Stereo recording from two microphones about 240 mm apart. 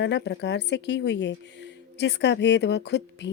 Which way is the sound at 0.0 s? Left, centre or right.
Left.